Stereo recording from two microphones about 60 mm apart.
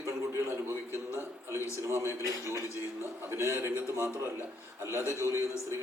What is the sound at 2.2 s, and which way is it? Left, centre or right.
Speech, left.